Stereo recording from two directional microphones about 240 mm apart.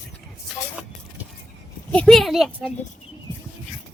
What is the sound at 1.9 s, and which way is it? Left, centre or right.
Speech, centre.